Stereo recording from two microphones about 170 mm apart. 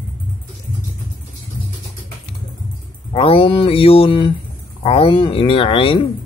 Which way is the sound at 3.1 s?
35° left (ahead or behind).